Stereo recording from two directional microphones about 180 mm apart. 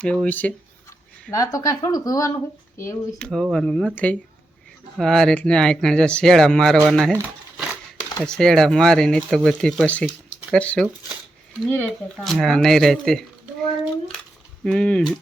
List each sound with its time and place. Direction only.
0.0 s speech: 5° left (ahead or behind)
1.3 s speech: 20° left (ahead or behind)
3.2 s speech: 5° left (ahead or behind)
8.2 s speech: 5° left (ahead or behind)
14.6 s speech: 5° left (ahead or behind)